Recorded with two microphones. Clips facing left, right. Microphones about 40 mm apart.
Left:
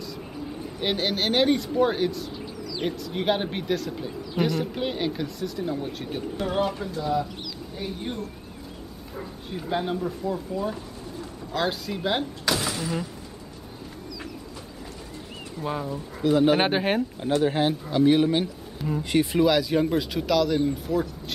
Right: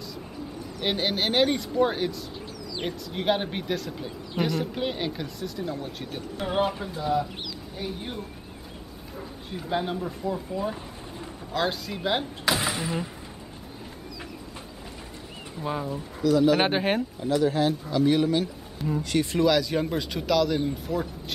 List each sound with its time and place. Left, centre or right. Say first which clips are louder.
0.8 s speech: left 1 dB; centre
6.4 s speech: right 1 dB; centre
9.5 s speech: left 1 dB; centre
12.4 s a sound: right 1 dB; right
15.6 s speech: even; centre
16.2 s speech: left 1 dB; left
16.5 s speech: left 1 dB; centre
17.2 s speech: even; left
17.8 s speech: left 5 dB; centre
18.8 s speech: even; centre
19.0 s speech: left 2 dB; centre